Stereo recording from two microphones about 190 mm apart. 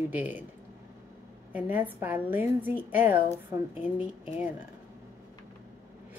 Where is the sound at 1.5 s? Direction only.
10° right (ahead or behind).